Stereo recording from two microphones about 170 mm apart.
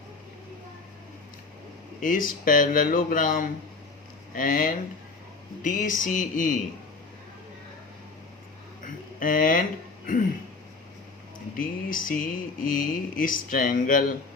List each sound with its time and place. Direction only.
2.0 s speech: 55° left (ahead or behind)
8.8 s a sound: 55° left (ahead or behind)
11.5 s speech: 55° left (ahead or behind)